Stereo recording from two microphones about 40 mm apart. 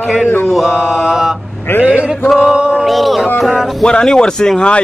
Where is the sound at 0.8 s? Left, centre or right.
Left.